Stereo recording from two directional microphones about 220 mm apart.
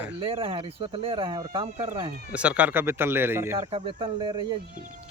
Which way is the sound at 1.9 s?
10° right (ahead or behind).